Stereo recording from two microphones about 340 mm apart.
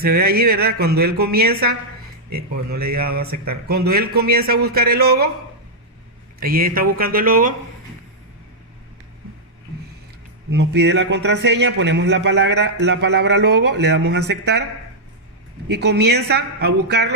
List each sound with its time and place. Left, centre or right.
0.0 s speech: right
6.4 s speech: right
10.5 s a man's voice: right
15.7 s speech: right